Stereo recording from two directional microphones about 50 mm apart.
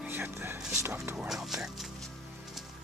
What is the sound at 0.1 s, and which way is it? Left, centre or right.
Speech, right.